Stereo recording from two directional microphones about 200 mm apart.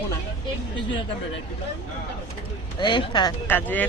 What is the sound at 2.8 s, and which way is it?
Speech, 25° left (ahead or behind).